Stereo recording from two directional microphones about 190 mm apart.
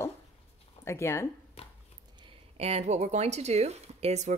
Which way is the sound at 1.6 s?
30° left (ahead or behind).